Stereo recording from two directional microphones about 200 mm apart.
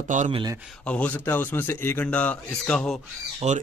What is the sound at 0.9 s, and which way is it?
A man's voice, 5° left (ahead or behind).